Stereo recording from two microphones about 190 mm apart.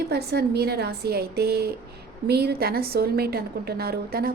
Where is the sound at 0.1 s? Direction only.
60° right (ahead or behind).